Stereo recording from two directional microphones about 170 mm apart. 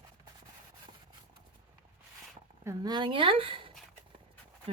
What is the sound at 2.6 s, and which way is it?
Speech, 20° right (ahead or behind).